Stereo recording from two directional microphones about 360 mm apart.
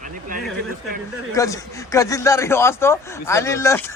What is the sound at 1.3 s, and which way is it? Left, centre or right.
Speech, centre.